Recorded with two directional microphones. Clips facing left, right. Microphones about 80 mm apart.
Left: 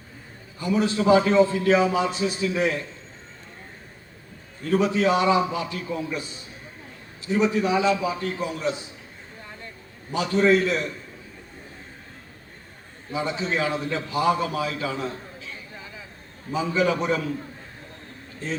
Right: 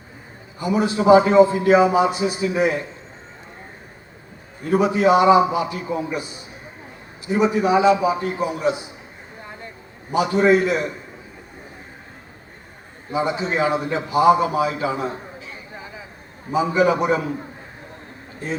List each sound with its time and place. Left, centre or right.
0.6 s a man's voice: right
4.6 s a man's voice: centre
9.4 s a sound: right
13.1 s a man's voice: right